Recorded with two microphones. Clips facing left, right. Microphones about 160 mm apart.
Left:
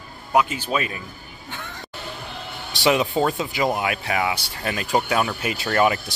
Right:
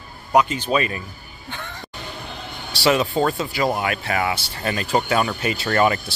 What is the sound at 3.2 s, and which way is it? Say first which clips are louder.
Speech: right 1 dB; centre (ahead or behind).